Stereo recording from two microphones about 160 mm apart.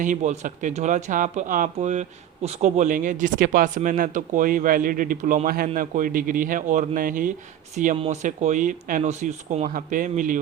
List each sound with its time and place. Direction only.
0.0 s a man's voice: 55° right (ahead or behind)
7.9 s speech: 40° right (ahead or behind)